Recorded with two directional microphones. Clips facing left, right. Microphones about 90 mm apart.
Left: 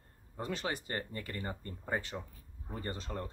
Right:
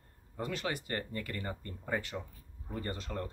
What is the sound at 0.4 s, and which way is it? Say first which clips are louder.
Speech: right 1 dB; 30° left (ahead or behind).